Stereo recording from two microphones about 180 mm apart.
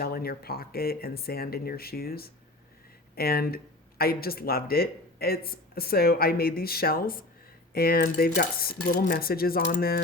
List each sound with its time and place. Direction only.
0.0 s speech: 55° left (ahead or behind)